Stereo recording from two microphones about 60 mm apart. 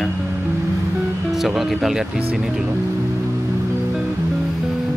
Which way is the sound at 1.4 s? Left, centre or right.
Centre.